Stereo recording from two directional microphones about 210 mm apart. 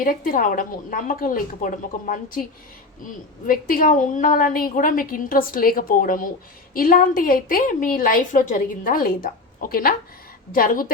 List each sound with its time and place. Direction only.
0.0 s a woman's voice: 40° left (ahead or behind)
3.4 s a woman's voice: 40° left (ahead or behind)